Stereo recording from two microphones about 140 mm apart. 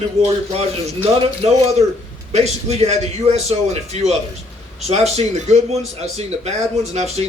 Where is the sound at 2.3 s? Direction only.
50° right (ahead or behind).